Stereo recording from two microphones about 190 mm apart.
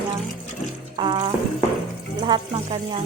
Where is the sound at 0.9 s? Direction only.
25° right (ahead or behind).